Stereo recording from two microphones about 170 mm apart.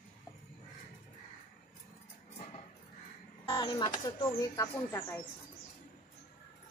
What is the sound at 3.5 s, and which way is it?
Speech, 25° left (ahead or behind).